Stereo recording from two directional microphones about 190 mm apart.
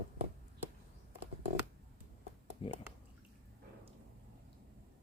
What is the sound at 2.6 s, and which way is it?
Speech, 25° left (ahead or behind).